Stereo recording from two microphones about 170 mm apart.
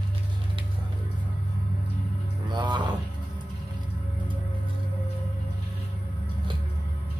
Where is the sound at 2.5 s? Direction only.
25° right (ahead or behind).